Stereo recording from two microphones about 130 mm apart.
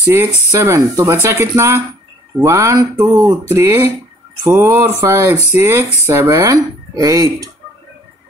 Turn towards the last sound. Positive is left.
turn(degrees=-25)  # may be behind; listen again after turning